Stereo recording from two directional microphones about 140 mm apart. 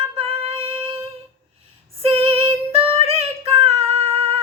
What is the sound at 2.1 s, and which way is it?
Female singing, 45° right (ahead or behind).